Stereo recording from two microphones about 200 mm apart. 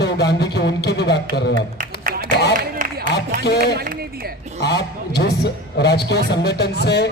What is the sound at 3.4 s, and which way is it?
A man's voice, 55° left (ahead or behind).